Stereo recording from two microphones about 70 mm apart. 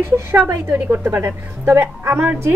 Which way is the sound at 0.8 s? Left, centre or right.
Right.